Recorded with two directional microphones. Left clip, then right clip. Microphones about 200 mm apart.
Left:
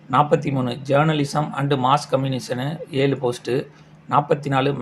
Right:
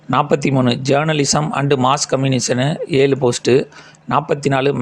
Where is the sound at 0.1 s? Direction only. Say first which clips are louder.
Right 2 dB; 40° right (ahead or behind).